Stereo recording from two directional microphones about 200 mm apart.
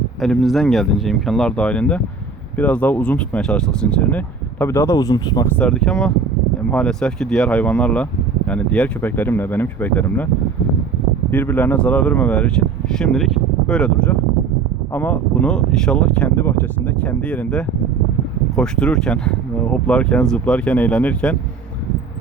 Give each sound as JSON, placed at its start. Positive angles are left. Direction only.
{"t": 0.2, "sound": "speech", "side_deg": 0}
{"t": 5.5, "sound": "speech", "side_deg": 5}
{"t": 11.3, "sound": "speech", "side_deg": 10}